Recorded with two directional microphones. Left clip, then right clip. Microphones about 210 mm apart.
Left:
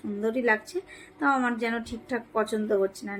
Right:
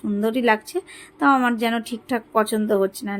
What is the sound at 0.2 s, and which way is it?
A woman's voice, 50° right (ahead or behind).